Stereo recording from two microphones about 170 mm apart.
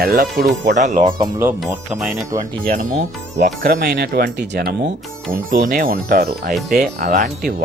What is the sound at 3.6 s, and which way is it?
Speech, 55° right (ahead or behind).